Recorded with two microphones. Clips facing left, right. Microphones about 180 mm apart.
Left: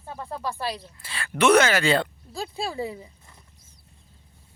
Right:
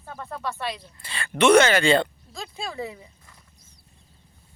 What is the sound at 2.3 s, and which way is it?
Speech, 35° left (ahead or behind).